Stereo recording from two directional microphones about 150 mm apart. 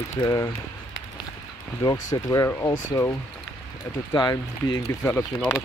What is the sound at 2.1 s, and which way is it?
Speech, 20° left (ahead or behind).